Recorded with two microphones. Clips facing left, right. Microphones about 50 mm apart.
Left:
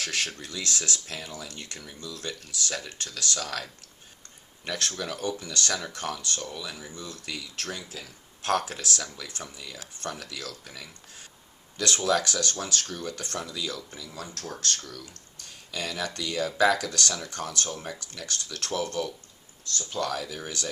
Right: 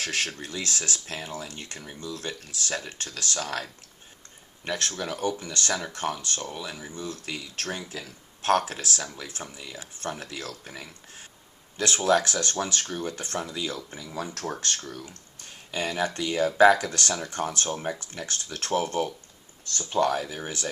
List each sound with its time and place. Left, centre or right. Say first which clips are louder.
0.0 s speech: right 1 dB; right